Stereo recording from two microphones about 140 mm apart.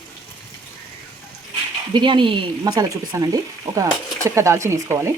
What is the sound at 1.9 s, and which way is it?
Speech, 35° right (ahead or behind).